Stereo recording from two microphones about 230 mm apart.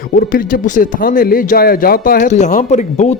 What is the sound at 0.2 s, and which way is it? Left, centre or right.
Speech, left.